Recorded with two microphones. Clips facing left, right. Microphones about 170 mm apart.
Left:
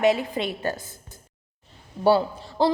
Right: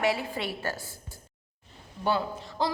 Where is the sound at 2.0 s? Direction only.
30° left (ahead or behind).